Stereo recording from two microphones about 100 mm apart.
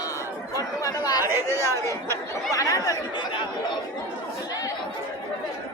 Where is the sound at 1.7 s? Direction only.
30° left (ahead or behind).